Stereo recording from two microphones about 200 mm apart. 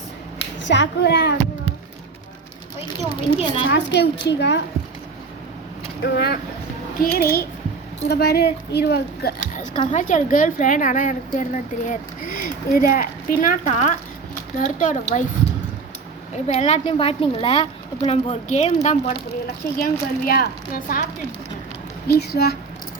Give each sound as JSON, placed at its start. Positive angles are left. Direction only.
{"t": 0.7, "sound": "a woman's voice", "side_deg": 60}
{"t": 3.3, "sound": "a woman's voice", "side_deg": 30}
{"t": 3.7, "sound": "a woman's voice", "side_deg": 60}
{"t": 6.0, "sound": "a woman's voice", "side_deg": 55}
{"t": 9.9, "sound": "a woman's voice", "side_deg": 40}
{"t": 16.5, "sound": "a woman's voice", "side_deg": 35}
{"t": 19.8, "sound": "speech", "side_deg": 45}
{"t": 22.0, "sound": "speech", "side_deg": 50}